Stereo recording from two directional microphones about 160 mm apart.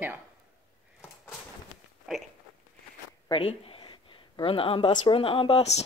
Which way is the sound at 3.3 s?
35° left (ahead or behind).